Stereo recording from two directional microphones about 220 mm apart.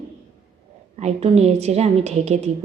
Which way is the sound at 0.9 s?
30° right (ahead or behind).